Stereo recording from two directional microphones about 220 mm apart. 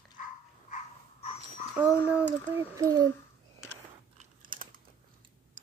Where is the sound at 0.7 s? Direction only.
30° left (ahead or behind).